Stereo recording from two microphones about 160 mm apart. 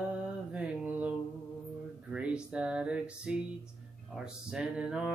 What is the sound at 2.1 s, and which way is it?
Music, 5° right (ahead or behind).